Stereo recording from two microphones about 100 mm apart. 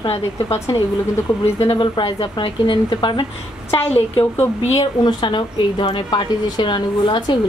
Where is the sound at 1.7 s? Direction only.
55° left (ahead or behind).